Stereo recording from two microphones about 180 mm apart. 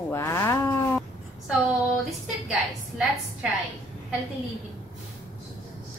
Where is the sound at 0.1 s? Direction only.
15° left (ahead or behind).